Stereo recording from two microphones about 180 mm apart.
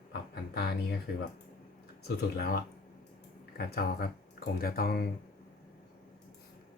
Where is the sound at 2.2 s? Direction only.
60° left (ahead or behind).